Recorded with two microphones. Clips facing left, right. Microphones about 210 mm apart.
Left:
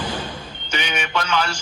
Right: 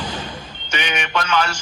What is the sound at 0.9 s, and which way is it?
Speech, 10° left (ahead or behind).